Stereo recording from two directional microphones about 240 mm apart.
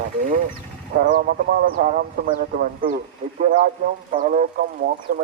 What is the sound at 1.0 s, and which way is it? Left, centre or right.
Speech, right.